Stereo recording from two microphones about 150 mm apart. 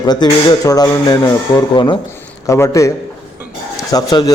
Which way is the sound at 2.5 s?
20° left (ahead or behind).